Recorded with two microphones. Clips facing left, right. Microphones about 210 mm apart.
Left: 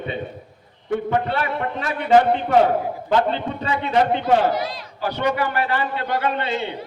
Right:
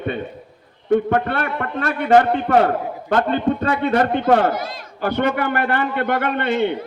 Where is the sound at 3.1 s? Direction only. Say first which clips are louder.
Right 3 dB; 55° right (ahead or behind).